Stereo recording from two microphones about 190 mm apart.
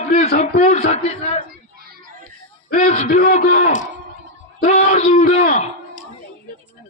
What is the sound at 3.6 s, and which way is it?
A man's voice, 35° left (ahead or behind).